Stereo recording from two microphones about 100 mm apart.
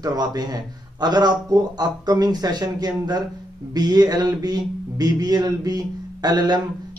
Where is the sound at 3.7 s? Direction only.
40° right (ahead or behind).